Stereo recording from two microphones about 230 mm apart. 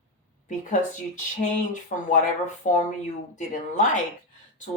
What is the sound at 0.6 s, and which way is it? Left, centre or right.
Speech, left.